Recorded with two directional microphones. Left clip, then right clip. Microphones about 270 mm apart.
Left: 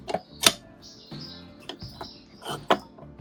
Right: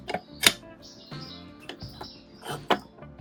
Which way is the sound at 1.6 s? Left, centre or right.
Centre.